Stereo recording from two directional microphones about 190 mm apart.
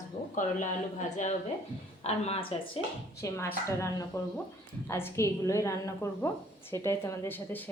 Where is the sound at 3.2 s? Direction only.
15° left (ahead or behind).